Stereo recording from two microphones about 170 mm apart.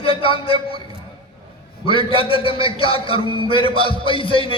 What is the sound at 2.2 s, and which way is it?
A man's voice, 30° left (ahead or behind).